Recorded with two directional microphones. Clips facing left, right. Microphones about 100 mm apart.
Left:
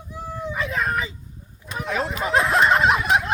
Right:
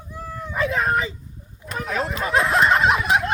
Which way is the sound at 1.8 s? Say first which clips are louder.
Even; centre (ahead or behind).